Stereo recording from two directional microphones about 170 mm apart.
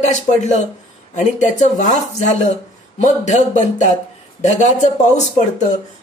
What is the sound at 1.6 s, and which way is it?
Speech, 45° left (ahead or behind).